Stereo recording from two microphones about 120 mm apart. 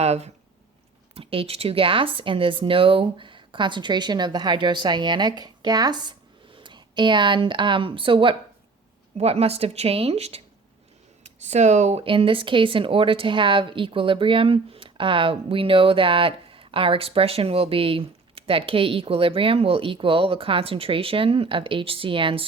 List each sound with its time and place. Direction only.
0.0 s speech: 60° right (ahead or behind)
1.1 s speech: 50° right (ahead or behind)
9.1 s speech: 60° right (ahead or behind)
11.2 s speech: 75° right (ahead or behind)
12.0 s a woman's voice: 45° right (ahead or behind)